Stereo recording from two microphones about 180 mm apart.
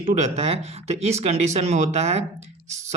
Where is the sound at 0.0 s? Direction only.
35° right (ahead or behind).